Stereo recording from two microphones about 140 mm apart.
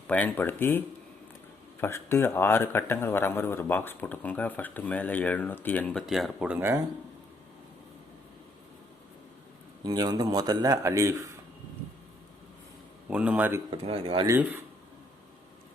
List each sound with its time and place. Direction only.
0.1 s speech: 10° left (ahead or behind)
1.8 s speech: 15° left (ahead or behind); by 6.7 s 10° right (ahead or behind)
9.8 s a man's voice: 30° right (ahead or behind)
13.1 s speech: 10° right (ahead or behind)
13.7 s speech: 40° right (ahead or behind)
14.3 s speech: 15° right (ahead or behind)